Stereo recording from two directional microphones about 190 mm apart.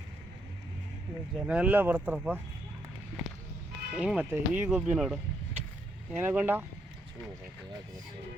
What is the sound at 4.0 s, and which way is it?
Speech, 5° right (ahead or behind).